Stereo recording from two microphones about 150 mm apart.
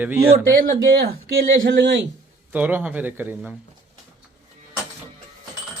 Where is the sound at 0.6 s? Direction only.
75° right (ahead or behind).